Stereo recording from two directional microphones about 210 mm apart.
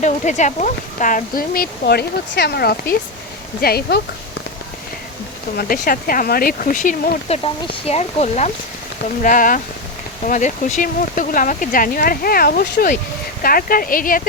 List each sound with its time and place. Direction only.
0.0 s speech: 35° left (ahead or behind)
5.5 s speech: 40° left (ahead or behind)
7.4 s speech: 25° left (ahead or behind)